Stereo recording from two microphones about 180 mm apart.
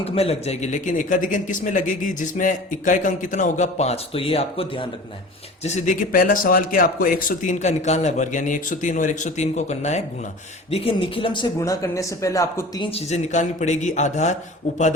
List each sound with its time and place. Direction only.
0.0 s speech: 35° left (ahead or behind)
5.6 s speech: 40° left (ahead or behind); by 12.9 s 20° left (ahead or behind)
12.9 s speech: 40° left (ahead or behind)